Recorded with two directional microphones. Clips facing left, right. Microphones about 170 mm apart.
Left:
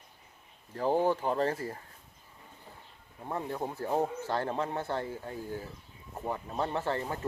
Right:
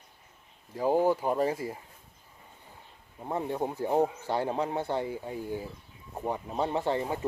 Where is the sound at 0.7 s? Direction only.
10° right (ahead or behind).